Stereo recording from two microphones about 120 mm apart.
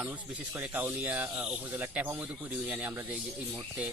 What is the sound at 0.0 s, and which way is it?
Speech, 20° right (ahead or behind).